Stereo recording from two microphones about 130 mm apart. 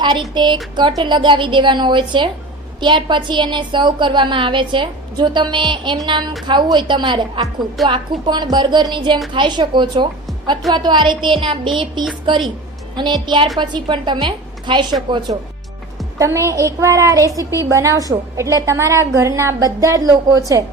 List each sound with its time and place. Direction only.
0.3 s a woman's voice: 35° right (ahead or behind)
16.1 s a woman's voice: 25° right (ahead or behind)